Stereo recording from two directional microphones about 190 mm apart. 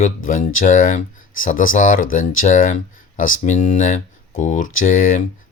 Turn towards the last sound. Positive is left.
turn(degrees=45)  # may be behind; listen again after turning